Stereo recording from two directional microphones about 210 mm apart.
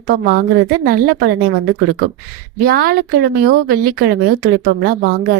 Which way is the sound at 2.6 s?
45° right (ahead or behind).